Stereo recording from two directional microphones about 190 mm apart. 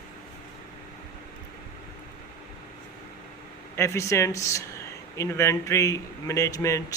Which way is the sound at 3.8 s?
15° left (ahead or behind).